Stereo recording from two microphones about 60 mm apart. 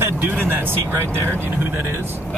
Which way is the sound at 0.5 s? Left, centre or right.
Right.